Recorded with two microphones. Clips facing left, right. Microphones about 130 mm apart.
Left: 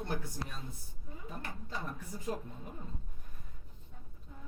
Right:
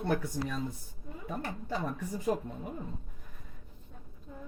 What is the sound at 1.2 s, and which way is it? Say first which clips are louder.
Speech: right 8 dB; 80° right.